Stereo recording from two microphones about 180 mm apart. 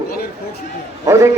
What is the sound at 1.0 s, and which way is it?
Speech, 15° right (ahead or behind).